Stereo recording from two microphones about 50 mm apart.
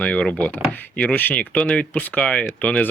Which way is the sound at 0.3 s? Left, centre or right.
Left.